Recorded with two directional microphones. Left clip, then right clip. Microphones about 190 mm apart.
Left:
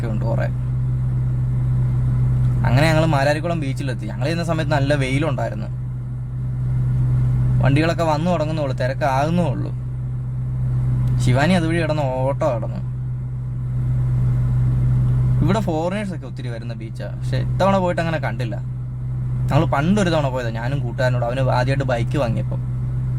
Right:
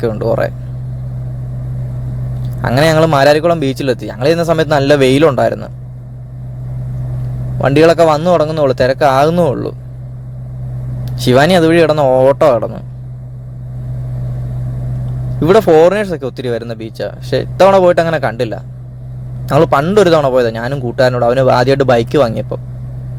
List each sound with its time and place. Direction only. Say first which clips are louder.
0.0 s speech: right 12 dB; 30° right (ahead or behind)
2.6 s speech: right 9 dB; 30° right (ahead or behind)
7.6 s a man's voice: right 12 dB; 30° right (ahead or behind)
11.2 s speech: right 12 dB; 30° right (ahead or behind)
15.4 s a man's voice: right 16 dB; 30° right (ahead or behind)